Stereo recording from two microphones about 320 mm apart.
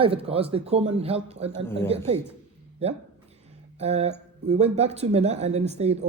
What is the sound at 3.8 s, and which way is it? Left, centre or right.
Speech, centre.